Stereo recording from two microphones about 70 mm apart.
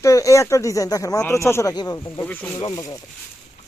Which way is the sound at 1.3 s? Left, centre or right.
Left.